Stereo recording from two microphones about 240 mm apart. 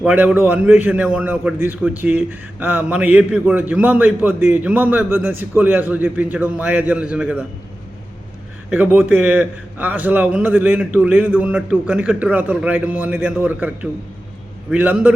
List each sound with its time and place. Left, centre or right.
0.0 s a man's voice: centre
8.7 s a man's voice: centre